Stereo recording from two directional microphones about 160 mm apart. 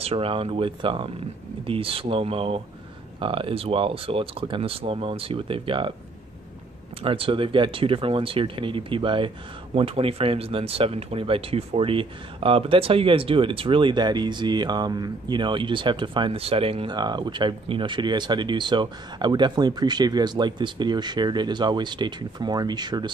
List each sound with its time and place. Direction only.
0.0 s speech: 35° right (ahead or behind)
7.0 s speech: 35° right (ahead or behind)